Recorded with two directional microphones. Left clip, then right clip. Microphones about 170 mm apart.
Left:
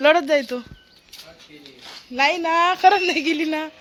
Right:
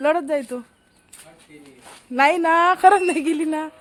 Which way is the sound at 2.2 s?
35° right (ahead or behind).